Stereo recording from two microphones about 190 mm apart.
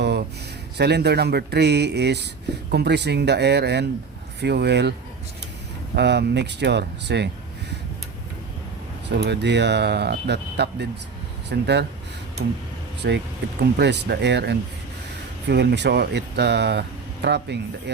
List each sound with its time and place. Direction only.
0.0 s a sound: 60° right (ahead or behind)
0.8 s speech: 60° right (ahead or behind)
6.0 s speech: 60° right (ahead or behind)
9.0 s speech: 65° right (ahead or behind)